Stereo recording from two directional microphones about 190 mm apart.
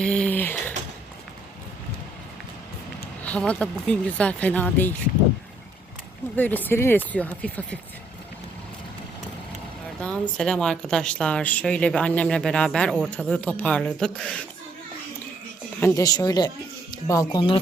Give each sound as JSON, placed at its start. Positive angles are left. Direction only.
{"t": 0.0, "sound": "a sound", "side_deg": 5}
{"t": 3.2, "sound": "speech", "side_deg": 5}
{"t": 6.3, "sound": "speech", "side_deg": 10}
{"t": 10.0, "sound": "a woman's voice", "side_deg": 5}
{"t": 15.8, "sound": "speech", "side_deg": 20}